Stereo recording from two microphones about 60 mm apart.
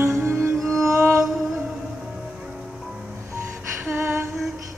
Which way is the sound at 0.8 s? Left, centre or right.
Right.